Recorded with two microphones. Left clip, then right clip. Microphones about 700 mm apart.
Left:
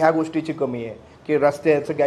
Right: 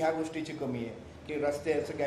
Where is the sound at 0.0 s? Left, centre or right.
Left.